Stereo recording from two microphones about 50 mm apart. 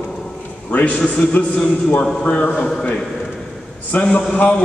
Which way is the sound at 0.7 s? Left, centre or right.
Left.